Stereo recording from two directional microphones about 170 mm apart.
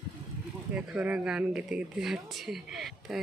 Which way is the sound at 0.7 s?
5° right (ahead or behind).